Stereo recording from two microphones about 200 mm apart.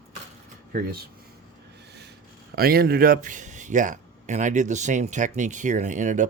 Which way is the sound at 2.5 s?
50° right (ahead or behind).